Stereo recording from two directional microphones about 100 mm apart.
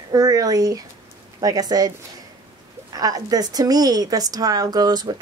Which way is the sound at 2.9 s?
40° right (ahead or behind).